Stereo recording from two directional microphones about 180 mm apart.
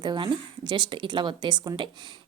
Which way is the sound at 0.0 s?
25° right (ahead or behind).